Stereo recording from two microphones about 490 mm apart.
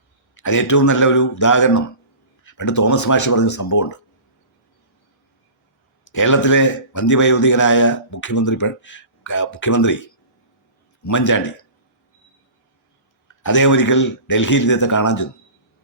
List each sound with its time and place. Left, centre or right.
0.4 s a man's voice: left
6.1 s a man's voice: left
11.0 s a man's voice: left
13.4 s a man's voice: left